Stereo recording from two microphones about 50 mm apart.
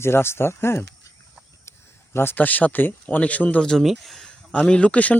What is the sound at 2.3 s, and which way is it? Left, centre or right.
Speech, left.